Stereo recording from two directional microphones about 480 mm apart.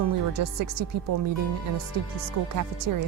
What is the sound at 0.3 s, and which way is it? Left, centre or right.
Speech, right.